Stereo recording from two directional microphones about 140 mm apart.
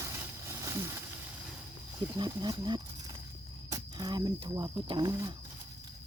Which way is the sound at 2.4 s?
30° right (ahead or behind).